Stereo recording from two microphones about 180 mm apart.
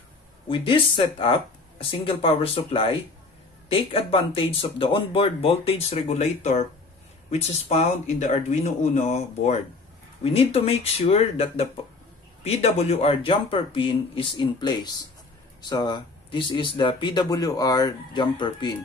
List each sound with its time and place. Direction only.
0.5 s speech: 30° left (ahead or behind)